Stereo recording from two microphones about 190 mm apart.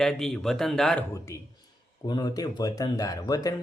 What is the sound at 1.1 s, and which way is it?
Speech, 15° left (ahead or behind).